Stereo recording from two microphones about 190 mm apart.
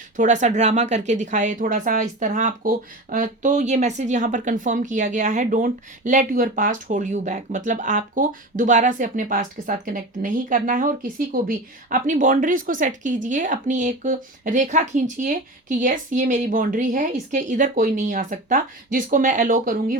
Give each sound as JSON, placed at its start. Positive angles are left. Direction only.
{"t": 0.2, "sound": "a woman's voice", "side_deg": -40}